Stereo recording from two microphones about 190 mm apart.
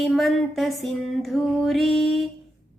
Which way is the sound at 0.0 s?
Centre (ahead or behind).